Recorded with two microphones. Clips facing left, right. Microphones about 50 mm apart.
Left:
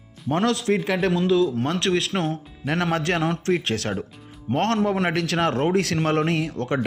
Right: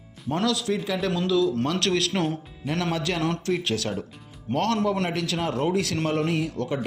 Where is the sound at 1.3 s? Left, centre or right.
Left.